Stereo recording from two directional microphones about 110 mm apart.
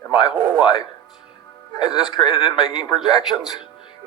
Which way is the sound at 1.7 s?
40° left (ahead or behind).